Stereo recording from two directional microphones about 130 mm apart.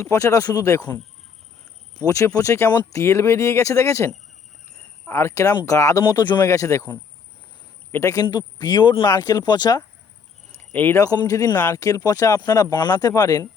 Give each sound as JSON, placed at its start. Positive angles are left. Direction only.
{"t": 0.0, "sound": "speech", "side_deg": 25}
{"t": 2.0, "sound": "speech", "side_deg": 25}
{"t": 10.7, "sound": "speech", "side_deg": 15}
{"t": 11.0, "sound": "speech", "side_deg": 25}